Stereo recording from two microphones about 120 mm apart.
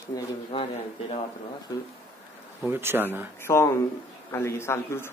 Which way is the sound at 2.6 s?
20° right (ahead or behind).